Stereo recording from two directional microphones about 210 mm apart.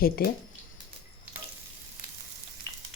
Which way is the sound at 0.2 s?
45° left (ahead or behind).